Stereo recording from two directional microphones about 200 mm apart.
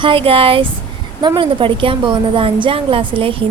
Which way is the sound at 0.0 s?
25° right (ahead or behind).